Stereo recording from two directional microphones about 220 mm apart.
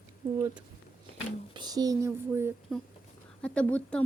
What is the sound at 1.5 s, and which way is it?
Speech, 20° right (ahead or behind).